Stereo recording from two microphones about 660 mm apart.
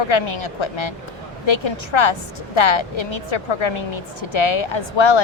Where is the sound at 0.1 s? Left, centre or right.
Left.